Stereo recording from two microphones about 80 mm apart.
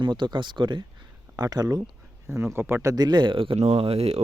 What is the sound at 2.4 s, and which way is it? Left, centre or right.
Speech, right.